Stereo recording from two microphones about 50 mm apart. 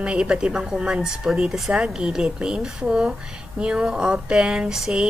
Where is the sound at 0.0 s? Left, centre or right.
Centre.